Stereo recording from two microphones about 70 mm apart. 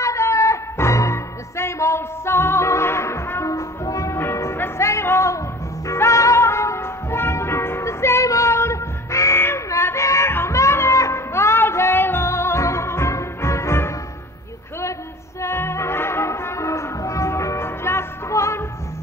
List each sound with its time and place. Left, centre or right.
0.0 s music: left
4.2 s music: left
15.4 s music: left